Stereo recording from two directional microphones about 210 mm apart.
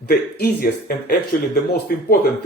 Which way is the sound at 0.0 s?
45° left (ahead or behind).